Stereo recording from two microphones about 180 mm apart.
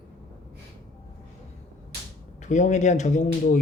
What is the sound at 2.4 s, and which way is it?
Speech, 40° left (ahead or behind).